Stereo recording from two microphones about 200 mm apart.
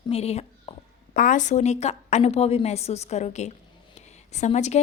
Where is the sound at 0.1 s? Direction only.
30° left (ahead or behind).